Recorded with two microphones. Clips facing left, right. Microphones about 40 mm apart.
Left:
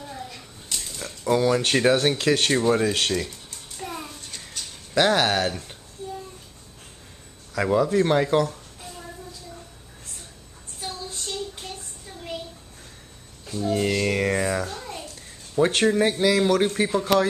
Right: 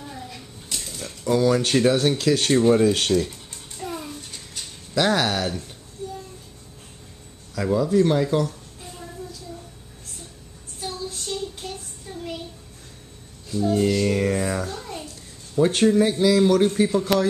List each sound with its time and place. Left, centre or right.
0.1 s a sound: centre
1.3 s speech: centre
2.6 s speech: centre
3.8 s a sound: centre
4.9 s speech: centre
7.5 s speech: left
10.8 s child singing: centre
13.7 s a child's voice: left; by 15.0 s centre
15.5 s speech: left